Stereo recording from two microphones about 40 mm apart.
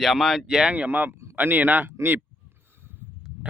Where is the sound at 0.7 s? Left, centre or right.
Right.